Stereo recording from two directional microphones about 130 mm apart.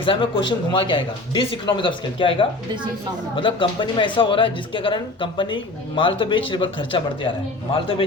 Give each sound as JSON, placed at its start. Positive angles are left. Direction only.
{"t": 0.0, "sound": "speech", "side_deg": 40}